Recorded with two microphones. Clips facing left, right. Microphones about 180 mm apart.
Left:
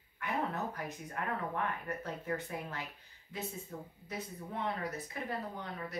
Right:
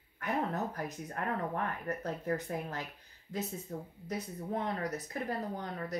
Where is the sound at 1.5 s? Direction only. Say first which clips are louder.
Right 1 dB; 40° right (ahead or behind).